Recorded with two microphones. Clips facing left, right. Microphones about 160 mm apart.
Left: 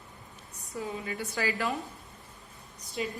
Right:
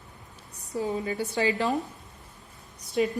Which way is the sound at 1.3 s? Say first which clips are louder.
Right 5 dB; 25° right (ahead or behind).